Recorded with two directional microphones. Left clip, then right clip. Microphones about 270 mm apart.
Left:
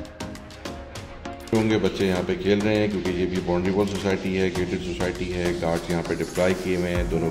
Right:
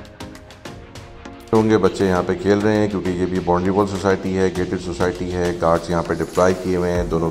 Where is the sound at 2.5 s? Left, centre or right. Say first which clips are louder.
Right 5 dB; centre.